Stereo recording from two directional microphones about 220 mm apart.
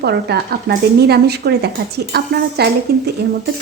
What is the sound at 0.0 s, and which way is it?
Speech, 50° right (ahead or behind).